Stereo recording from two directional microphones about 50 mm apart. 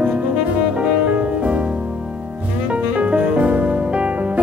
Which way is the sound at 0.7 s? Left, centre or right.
Right.